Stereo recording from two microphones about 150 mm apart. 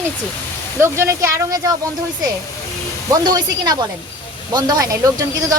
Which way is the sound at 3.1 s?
25° right (ahead or behind).